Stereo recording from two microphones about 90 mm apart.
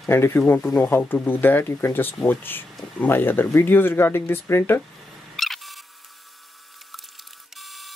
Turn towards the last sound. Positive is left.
turn(degrees=0)  # may be behind; listen again after turning